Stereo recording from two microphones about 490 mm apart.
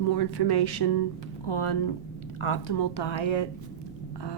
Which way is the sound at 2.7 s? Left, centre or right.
Left.